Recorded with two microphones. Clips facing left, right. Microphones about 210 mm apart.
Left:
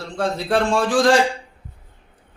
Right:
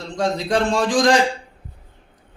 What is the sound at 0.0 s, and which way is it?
Speech, 15° right (ahead or behind).